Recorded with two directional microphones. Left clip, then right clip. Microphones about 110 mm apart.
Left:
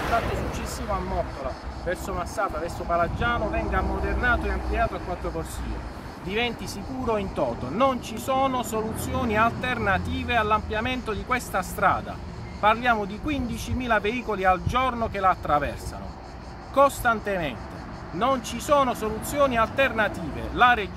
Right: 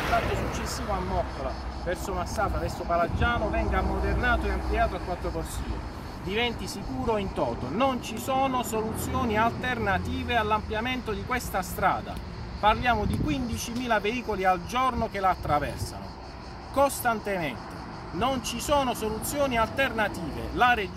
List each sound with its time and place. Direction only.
0.1 s speech: 55° left (ahead or behind)
1.9 s speech: 45° left (ahead or behind)
2.4 s speech: 15° left (ahead or behind)
7.1 s speech: 30° left (ahead or behind); by 15.7 s 5° left (ahead or behind)
16.7 s speech: 5° left (ahead or behind)